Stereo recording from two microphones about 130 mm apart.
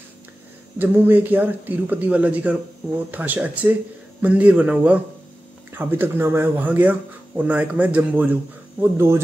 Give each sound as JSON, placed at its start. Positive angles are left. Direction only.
{"t": 0.7, "sound": "speech", "side_deg": -15}